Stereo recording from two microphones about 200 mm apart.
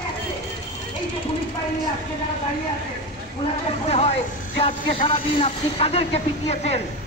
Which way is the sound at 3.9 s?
30° left (ahead or behind).